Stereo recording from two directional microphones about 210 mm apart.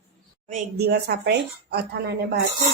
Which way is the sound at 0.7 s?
50° right (ahead or behind).